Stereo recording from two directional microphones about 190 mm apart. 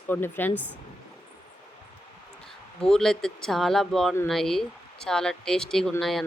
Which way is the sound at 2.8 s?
5° left (ahead or behind).